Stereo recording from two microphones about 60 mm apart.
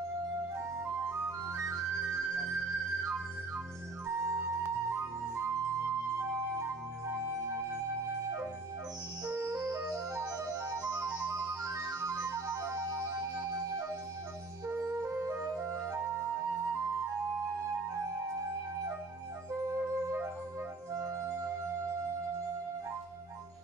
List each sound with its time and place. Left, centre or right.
0.6 s music: right
4.2 s music: right
9.3 s music: right
9.8 s music: right
15.2 s music: right
15.5 s music: right
20.9 s music: right